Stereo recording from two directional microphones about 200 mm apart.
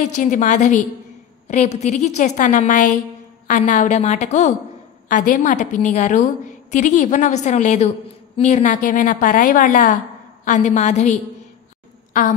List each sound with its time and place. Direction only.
0.0 s a woman's voice: 40° left (ahead or behind)